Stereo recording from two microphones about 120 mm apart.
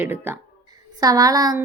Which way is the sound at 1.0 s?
30° right (ahead or behind).